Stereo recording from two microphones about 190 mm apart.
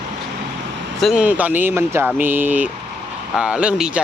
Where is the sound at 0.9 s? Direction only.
Centre (ahead or behind).